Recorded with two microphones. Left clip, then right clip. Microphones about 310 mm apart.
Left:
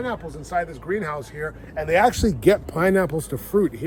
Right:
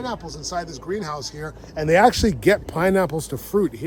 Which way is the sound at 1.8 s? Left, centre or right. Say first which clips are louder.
Right 3 dB; right.